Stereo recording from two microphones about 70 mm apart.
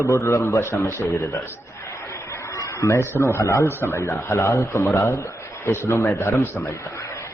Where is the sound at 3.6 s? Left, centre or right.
Left.